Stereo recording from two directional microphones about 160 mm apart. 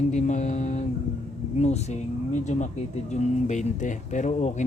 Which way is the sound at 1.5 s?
45° left (ahead or behind).